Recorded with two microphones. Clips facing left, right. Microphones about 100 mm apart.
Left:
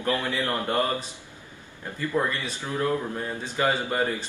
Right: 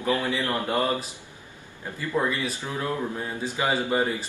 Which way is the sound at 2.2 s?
15° right (ahead or behind).